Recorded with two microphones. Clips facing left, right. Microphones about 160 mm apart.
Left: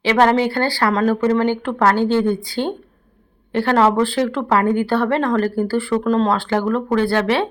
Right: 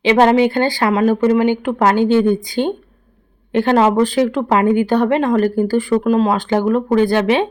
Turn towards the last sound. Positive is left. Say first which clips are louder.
# right 3 dB
turn(degrees=-15)  # may be behind; listen again after turning